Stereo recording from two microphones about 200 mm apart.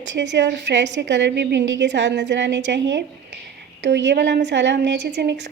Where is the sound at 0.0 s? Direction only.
65° right (ahead or behind).